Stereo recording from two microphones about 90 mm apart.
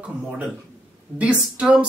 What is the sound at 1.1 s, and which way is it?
Speech, 15° right (ahead or behind).